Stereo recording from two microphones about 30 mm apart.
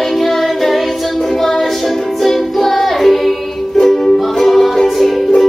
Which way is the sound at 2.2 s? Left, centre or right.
Centre.